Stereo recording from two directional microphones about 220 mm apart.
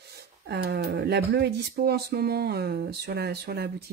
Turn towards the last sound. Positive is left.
turn(degrees=-45)  # may be behind; listen again after turning